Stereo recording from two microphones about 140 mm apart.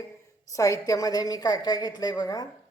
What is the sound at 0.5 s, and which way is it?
A woman's voice, 25° left (ahead or behind).